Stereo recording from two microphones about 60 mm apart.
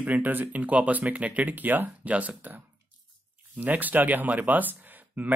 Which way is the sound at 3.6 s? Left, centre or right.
Right.